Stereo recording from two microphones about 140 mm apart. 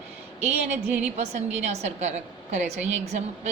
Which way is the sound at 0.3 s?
50° right (ahead or behind).